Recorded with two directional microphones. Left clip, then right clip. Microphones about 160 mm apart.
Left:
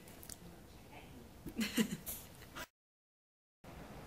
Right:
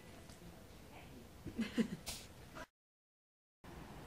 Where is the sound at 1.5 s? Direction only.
20° left (ahead or behind).